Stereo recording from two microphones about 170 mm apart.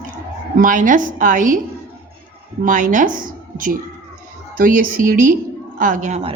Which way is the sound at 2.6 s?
50° right (ahead or behind).